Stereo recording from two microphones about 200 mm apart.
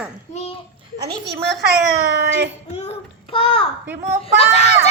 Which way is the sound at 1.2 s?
Centre (ahead or behind).